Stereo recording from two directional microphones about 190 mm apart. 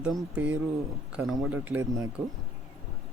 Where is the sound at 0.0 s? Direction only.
5° right (ahead or behind).